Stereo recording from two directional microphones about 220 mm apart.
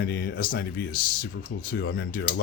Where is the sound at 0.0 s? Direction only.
45° left (ahead or behind).